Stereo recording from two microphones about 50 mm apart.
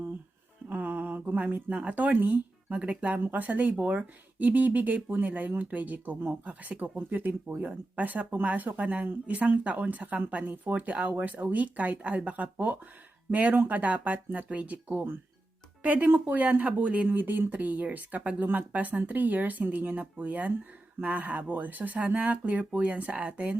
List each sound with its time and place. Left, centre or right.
0.7 s music: right
1.4 s speech: right